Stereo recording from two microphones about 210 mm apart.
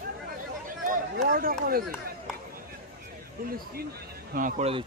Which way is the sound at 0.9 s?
45° right (ahead or behind).